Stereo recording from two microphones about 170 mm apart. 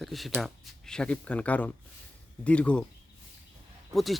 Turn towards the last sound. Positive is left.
turn(degrees=0)  # may be behind; listen again after turning